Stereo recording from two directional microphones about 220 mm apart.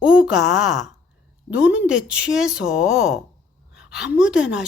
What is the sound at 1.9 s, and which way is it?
A woman's voice, 5° right (ahead or behind).